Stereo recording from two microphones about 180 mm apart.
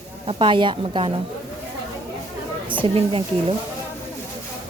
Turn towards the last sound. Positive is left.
turn(degrees=-30)  # may be behind; listen again after turning